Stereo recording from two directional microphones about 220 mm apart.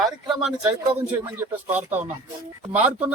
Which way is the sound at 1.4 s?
10° right (ahead or behind).